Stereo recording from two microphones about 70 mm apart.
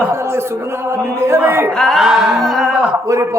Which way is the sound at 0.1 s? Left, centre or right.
Right.